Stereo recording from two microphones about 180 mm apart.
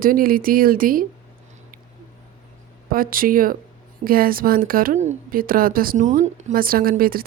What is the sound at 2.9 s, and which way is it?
A woman's voice, 50° right (ahead or behind).